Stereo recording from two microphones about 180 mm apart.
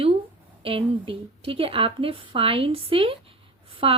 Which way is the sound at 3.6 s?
30° right (ahead or behind).